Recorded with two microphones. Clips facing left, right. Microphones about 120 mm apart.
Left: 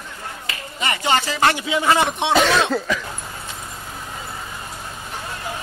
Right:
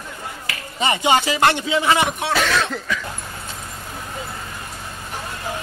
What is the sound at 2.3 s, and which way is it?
Cough, 25° left (ahead or behind).